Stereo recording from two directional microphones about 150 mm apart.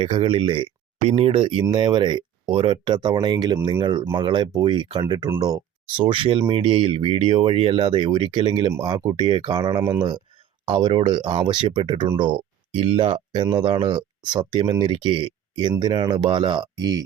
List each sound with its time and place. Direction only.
0.0 s speech: 35° right (ahead or behind)